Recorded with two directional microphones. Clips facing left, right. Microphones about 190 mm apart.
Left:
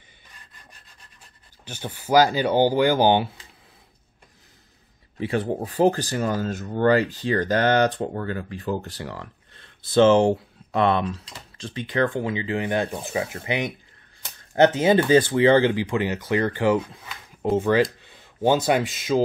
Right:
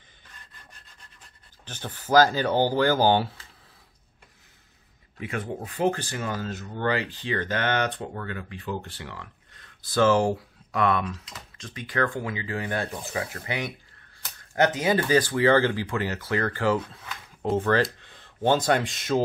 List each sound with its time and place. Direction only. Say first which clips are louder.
1.6 s speech: left 3 dB; 10° left (ahead or behind)
5.2 s speech: left 7 dB; 30° left (ahead or behind); by 19.2 s centre (ahead or behind)